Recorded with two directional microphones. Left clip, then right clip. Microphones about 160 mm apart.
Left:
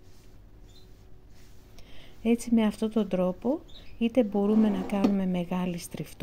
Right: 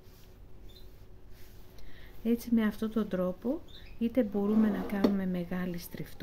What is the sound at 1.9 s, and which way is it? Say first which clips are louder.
Speech: left 5 dB; 25° left (ahead or behind).